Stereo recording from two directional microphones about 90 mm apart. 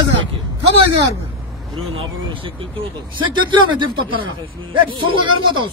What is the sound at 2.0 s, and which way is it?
A man's voice, 80° right.